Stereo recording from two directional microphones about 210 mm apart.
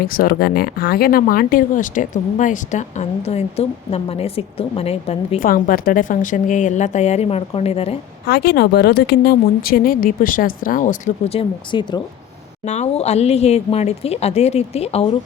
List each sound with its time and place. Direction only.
0.1 s speech: 45° left (ahead or behind); by 5.5 s 30° left (ahead or behind)
5.5 s speech: 40° left (ahead or behind)
8.3 s speech: 50° left (ahead or behind); by 15.0 s 30° left (ahead or behind)